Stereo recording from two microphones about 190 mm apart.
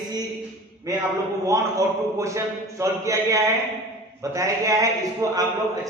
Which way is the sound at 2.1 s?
15° right (ahead or behind).